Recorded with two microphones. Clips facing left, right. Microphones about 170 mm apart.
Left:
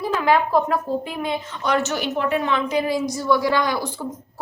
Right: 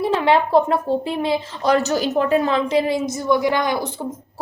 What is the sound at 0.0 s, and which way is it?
A woman's voice, 30° right (ahead or behind).